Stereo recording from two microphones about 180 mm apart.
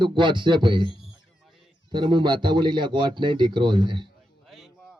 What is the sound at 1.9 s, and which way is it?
A man's voice, 25° right (ahead or behind).